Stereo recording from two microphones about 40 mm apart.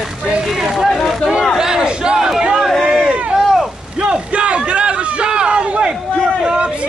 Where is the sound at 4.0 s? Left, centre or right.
Right.